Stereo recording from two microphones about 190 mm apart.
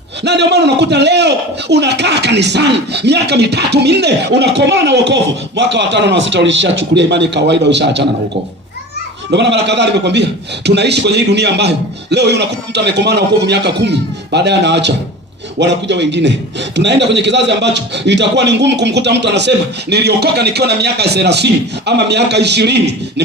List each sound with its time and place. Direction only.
0.2 s a man's voice: 65° right (ahead or behind)
9.3 s a man's voice: 65° right (ahead or behind)